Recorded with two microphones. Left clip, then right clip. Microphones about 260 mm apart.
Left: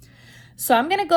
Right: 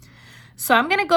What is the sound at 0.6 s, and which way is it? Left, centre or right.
Speech, right.